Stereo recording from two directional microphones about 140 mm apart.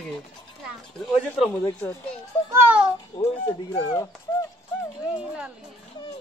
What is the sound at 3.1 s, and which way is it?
Speech, 30° left (ahead or behind).